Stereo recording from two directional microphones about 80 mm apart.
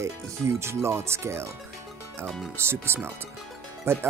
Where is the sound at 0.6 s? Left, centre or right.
Right.